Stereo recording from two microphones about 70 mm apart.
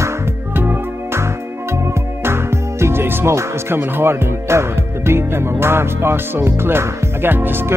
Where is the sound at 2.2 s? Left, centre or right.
Right.